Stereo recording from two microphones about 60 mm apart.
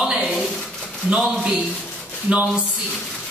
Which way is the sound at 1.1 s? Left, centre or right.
Centre.